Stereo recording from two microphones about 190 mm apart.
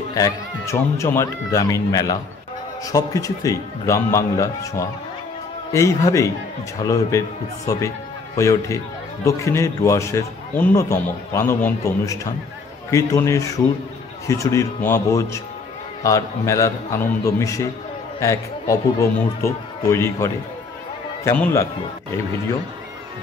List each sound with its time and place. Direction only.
0.1 s a man's voice: 15° left (ahead or behind)